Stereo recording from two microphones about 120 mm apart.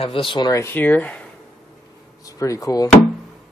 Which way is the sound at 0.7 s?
15° left (ahead or behind).